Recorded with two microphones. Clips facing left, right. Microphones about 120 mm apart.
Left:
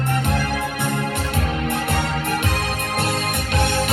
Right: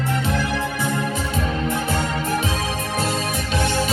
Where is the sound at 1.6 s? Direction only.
60° left (ahead or behind).